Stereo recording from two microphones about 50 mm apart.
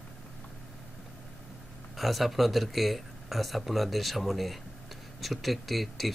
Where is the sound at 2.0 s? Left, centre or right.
Centre.